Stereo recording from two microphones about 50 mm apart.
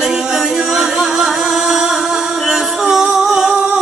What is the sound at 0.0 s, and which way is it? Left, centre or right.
Music, centre.